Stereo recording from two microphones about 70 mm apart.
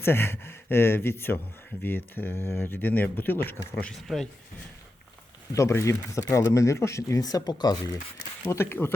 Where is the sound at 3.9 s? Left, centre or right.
Centre.